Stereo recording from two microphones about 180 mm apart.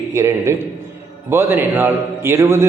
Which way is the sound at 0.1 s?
15° right (ahead or behind).